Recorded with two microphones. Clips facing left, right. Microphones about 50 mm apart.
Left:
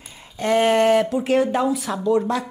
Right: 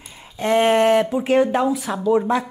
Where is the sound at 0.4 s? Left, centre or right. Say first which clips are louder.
Right 1 dB; centre.